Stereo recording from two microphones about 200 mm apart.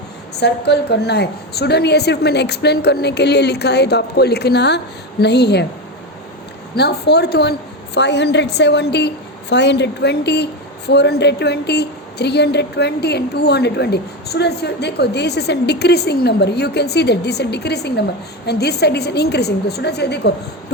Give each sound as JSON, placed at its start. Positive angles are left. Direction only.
{"t": 0.3, "sound": "a woman's voice", "side_deg": 55}
{"t": 6.7, "sound": "a woman's voice", "side_deg": 55}